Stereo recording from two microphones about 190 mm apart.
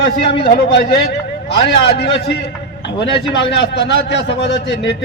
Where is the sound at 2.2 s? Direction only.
60° left (ahead or behind).